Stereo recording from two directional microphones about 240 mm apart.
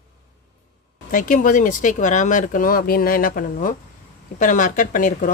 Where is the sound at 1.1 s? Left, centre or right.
Left.